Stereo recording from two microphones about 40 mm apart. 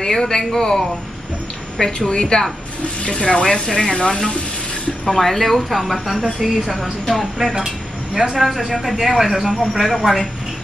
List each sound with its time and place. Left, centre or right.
0.0 s speech: centre
1.8 s speech: centre
5.0 s a woman's voice: centre
7.5 s a woman's voice: centre